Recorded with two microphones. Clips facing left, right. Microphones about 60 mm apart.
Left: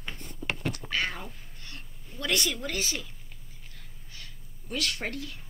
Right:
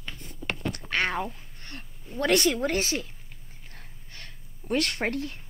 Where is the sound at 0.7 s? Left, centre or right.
Right.